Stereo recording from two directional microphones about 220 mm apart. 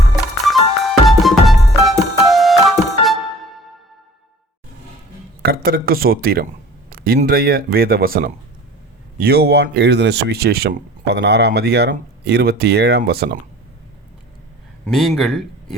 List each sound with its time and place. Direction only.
0.4 s music: centre (ahead or behind)
5.4 s speech: 40° right (ahead or behind)
14.8 s speech: centre (ahead or behind)